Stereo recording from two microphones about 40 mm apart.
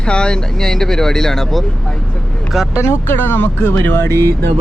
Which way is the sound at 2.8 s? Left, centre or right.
Left.